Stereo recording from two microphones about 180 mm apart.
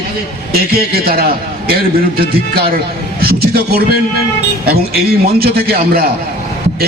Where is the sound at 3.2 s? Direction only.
55° right (ahead or behind).